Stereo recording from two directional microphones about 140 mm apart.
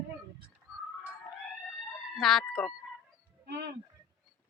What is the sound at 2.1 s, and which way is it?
Speech, centre (ahead or behind).